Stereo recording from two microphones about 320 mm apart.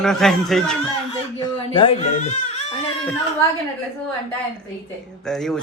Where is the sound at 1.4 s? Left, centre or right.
Centre.